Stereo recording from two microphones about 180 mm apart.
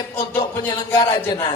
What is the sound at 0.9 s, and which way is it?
Speech, 25° left (ahead or behind).